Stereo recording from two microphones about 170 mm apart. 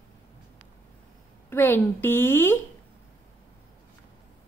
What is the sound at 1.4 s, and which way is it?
A woman's voice, 15° left (ahead or behind).